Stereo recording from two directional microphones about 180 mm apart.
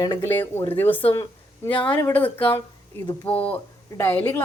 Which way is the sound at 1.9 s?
10° left (ahead or behind).